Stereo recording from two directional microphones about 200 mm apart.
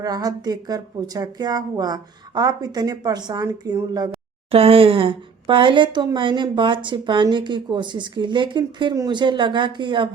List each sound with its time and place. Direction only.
0.0 s speech: 20° right (ahead or behind)